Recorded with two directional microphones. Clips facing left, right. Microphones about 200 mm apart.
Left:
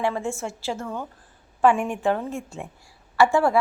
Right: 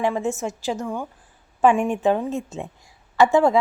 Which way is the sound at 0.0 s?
20° right (ahead or behind).